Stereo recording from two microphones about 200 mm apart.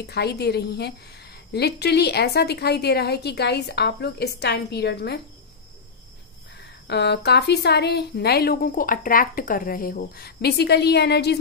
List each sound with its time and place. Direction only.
0.0 s a woman's voice: 55° left (ahead or behind)
6.9 s a woman's voice: 55° left (ahead or behind)